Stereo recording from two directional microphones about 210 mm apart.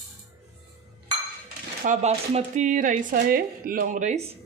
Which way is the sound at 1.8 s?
35° right (ahead or behind).